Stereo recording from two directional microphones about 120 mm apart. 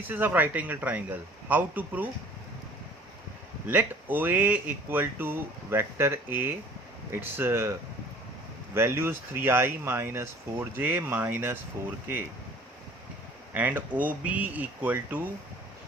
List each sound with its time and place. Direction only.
0.0 s speech: 15° right (ahead or behind)
3.7 s speech: 15° right (ahead or behind)
13.5 s speech: 15° right (ahead or behind)